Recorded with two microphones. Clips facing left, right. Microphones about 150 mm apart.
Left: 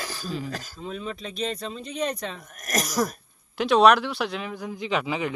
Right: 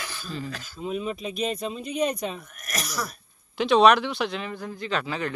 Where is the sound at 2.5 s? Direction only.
45° left (ahead or behind).